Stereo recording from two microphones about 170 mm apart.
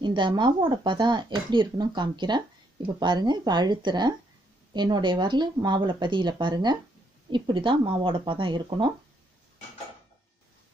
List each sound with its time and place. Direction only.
0.0 s speech: 30° right (ahead or behind)